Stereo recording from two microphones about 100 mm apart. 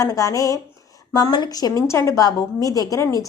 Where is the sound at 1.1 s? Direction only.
45° left (ahead or behind).